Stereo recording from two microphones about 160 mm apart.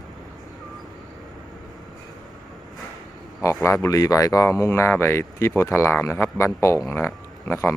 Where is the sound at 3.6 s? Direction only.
15° left (ahead or behind).